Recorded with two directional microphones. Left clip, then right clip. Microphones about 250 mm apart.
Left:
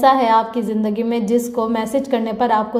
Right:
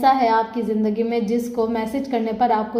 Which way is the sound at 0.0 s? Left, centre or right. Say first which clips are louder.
Left 3 dB; left.